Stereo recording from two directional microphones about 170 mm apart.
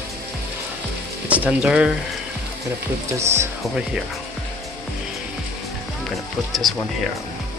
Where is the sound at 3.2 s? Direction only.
15° right (ahead or behind).